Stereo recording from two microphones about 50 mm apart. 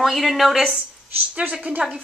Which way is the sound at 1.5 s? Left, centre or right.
Centre.